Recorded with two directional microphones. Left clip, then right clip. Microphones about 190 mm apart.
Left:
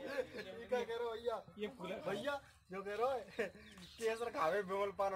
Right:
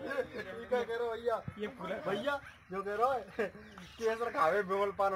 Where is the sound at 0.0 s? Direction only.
Centre (ahead or behind).